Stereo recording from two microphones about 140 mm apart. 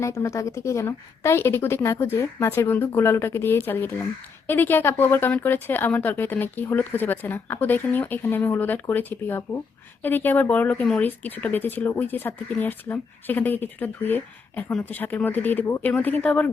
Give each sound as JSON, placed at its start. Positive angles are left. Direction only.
{"t": 0.0, "sound": "speech", "side_deg": 20}